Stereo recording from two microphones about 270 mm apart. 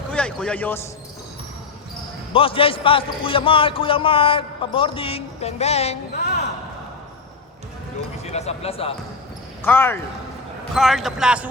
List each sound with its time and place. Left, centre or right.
0.1 s basketball bounce: centre
2.3 s a man's voice: centre
8.2 s a man's voice: left
9.6 s a man's voice: centre